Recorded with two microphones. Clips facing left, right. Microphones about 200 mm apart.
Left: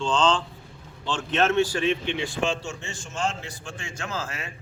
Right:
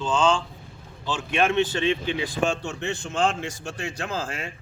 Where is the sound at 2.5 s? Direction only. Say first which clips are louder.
Right 3 dB; 60° right (ahead or behind).